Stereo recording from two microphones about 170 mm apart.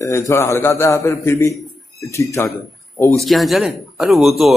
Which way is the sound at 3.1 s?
Centre (ahead or behind).